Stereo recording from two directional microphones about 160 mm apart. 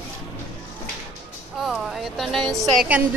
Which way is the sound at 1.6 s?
Centre (ahead or behind).